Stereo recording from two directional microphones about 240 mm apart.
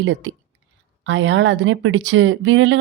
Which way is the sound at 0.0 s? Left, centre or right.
Right.